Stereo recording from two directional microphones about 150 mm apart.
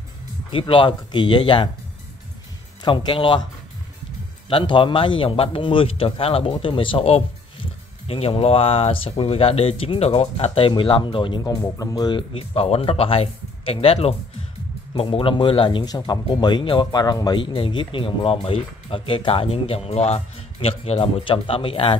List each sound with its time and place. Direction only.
0.5 s speech: 35° left (ahead or behind)
2.8 s speech: 30° left (ahead or behind)
4.5 s speech: 35° left (ahead or behind)